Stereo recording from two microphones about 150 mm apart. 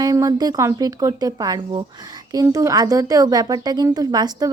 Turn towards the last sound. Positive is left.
turn(degrees=-25)  # may be behind; listen again after turning